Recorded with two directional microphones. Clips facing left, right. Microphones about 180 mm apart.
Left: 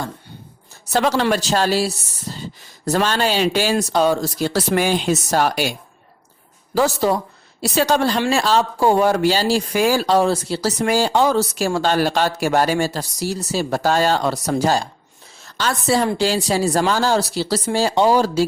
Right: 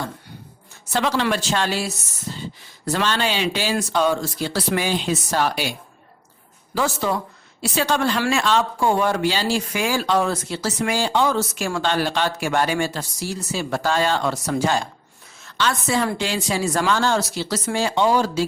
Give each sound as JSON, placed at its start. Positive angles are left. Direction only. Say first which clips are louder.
{"t": 0.9, "sound": "speech", "louder": "left 4 dB", "side_deg": 40}
{"t": 6.7, "sound": "a woman's voice", "louder": "left 5 dB", "side_deg": 40}